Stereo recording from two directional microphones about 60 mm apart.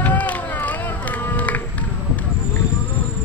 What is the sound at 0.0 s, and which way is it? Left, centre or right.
Music, left.